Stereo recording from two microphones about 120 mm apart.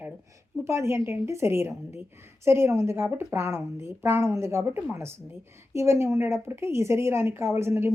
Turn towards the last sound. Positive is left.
turn(degrees=-20)  # may be behind; listen again after turning